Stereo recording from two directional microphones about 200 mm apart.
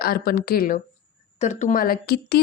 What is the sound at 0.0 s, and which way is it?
Speech, 50° left (ahead or behind).